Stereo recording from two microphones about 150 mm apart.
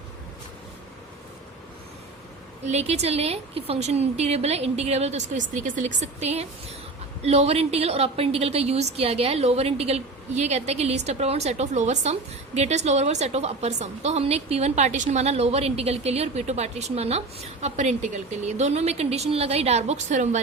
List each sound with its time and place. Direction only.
2.6 s a woman's voice: 45° right (ahead or behind)